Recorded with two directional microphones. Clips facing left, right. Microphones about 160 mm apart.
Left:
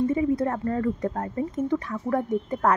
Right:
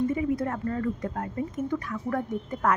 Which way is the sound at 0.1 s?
30° left (ahead or behind).